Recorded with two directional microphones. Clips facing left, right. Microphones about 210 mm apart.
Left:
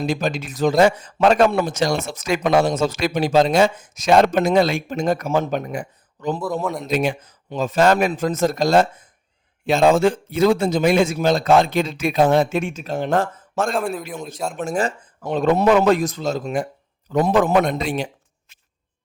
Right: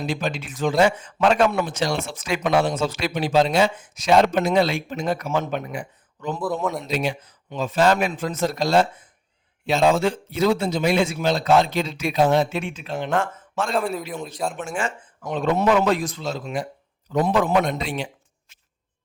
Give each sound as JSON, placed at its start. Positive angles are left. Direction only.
{"t": 0.0, "sound": "a man's voice", "side_deg": 40}
{"t": 6.4, "sound": "a man's voice", "side_deg": 0}
{"t": 6.8, "sound": "a man's voice", "side_deg": 50}
{"t": 13.7, "sound": "a man's voice", "side_deg": 0}
{"t": 14.6, "sound": "speech", "side_deg": 40}
{"t": 15.4, "sound": "a man's voice", "side_deg": 45}